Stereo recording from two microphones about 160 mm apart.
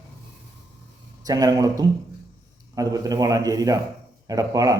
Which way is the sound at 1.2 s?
25° right (ahead or behind).